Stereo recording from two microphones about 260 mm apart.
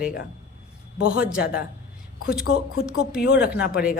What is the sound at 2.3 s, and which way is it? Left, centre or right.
Speech, left.